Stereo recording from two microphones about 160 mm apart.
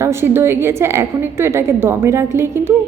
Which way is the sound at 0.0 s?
15° right (ahead or behind).